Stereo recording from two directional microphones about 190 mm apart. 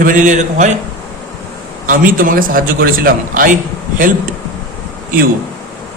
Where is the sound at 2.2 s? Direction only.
50° right (ahead or behind).